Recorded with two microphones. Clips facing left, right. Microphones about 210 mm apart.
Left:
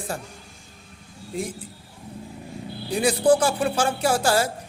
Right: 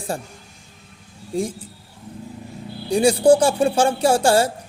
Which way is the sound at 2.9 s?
30° right (ahead or behind).